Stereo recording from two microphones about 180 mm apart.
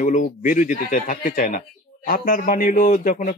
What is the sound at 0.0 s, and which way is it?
Speech, 45° left (ahead or behind).